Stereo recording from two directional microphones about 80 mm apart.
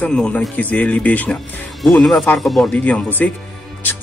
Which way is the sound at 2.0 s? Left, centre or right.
Centre.